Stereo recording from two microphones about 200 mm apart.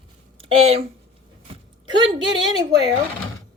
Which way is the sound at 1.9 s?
25° right (ahead or behind).